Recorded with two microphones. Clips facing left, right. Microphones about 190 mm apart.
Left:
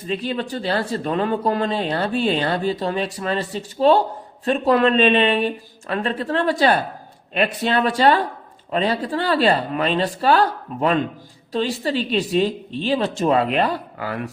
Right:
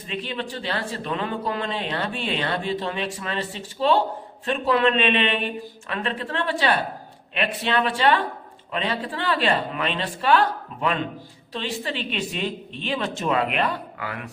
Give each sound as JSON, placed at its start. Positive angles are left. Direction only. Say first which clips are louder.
{"t": 0.1, "sound": "speech", "louder": "left 6 dB", "side_deg": 40}